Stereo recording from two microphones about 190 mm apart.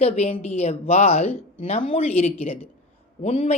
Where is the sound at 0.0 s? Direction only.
35° left (ahead or behind).